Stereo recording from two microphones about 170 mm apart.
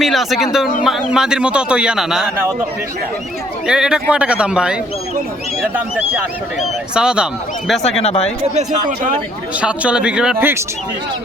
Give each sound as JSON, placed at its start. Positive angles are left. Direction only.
{"t": 0.0, "sound": "a man's voice", "side_deg": 0}
{"t": 3.7, "sound": "a man's voice", "side_deg": -5}
{"t": 6.9, "sound": "a man's voice", "side_deg": -5}
{"t": 8.0, "sound": "speech", "side_deg": 40}
{"t": 9.6, "sound": "speech", "side_deg": -5}